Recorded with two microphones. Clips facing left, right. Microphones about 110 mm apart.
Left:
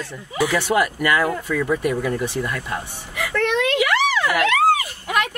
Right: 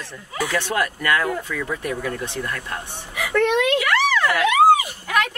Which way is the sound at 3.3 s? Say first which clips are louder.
Right 2 dB; 10° right (ahead or behind).